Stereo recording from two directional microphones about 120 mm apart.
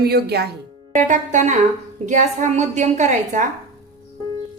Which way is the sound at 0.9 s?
90° right.